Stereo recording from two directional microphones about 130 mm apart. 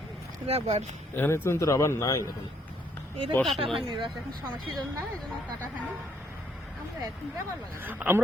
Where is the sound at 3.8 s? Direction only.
35° right (ahead or behind).